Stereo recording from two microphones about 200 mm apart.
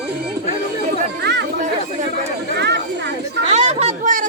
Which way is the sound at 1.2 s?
60° right (ahead or behind).